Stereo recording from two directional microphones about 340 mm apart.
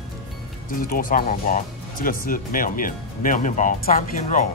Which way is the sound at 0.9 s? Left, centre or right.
Left.